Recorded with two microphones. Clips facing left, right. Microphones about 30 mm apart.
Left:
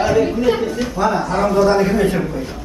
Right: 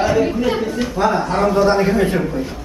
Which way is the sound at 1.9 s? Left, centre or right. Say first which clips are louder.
Even; centre.